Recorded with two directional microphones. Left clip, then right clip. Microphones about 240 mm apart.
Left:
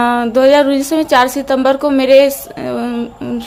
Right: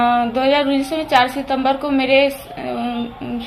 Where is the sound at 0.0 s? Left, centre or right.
Left.